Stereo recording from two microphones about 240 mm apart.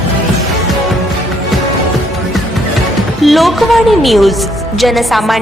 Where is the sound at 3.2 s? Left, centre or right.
Centre.